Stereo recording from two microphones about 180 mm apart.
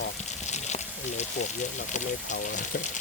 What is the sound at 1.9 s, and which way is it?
Speech, 45° left (ahead or behind).